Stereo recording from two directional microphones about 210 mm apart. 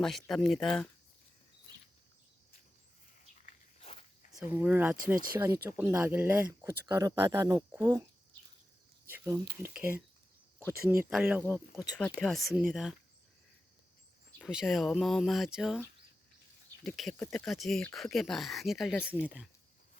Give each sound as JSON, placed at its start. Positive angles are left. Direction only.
{"t": 0.0, "sound": "speech", "side_deg": 0}
{"t": 3.4, "sound": "walk", "side_deg": 30}
{"t": 4.4, "sound": "speech", "side_deg": -10}
{"t": 9.0, "sound": "speech", "side_deg": -10}
{"t": 11.1, "sound": "speech", "side_deg": -5}
{"t": 11.9, "sound": "speech", "side_deg": 5}
{"t": 14.3, "sound": "speech", "side_deg": 0}
{"t": 16.8, "sound": "speech", "side_deg": 0}